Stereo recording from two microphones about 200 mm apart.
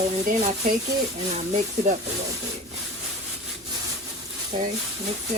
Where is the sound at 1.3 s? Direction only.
35° right (ahead or behind).